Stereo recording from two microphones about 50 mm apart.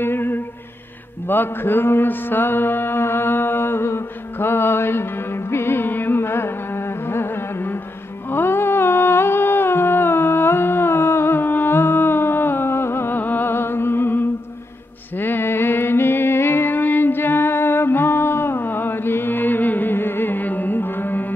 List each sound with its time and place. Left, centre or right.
0.0 s humming: left
1.2 s mantra: left
8.3 s humming: left
13.2 s music: left